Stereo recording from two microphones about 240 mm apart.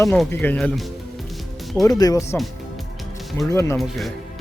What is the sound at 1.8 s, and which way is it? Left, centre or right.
Speech, centre.